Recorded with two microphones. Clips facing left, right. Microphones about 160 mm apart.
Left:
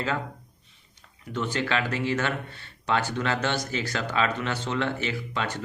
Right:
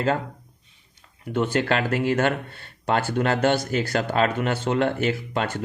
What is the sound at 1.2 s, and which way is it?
Speech, 55° right (ahead or behind).